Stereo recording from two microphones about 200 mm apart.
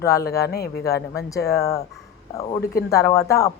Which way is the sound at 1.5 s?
15° left (ahead or behind).